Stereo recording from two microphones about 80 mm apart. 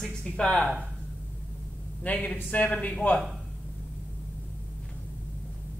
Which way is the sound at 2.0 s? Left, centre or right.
Centre.